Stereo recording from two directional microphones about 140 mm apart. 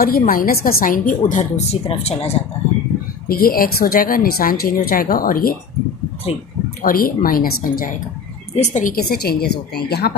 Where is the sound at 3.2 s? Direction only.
90° left.